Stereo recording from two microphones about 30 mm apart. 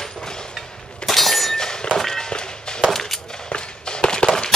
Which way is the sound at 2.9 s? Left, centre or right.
Centre.